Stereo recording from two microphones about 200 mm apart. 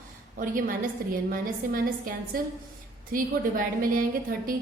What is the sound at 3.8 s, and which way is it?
Speech, 45° right (ahead or behind).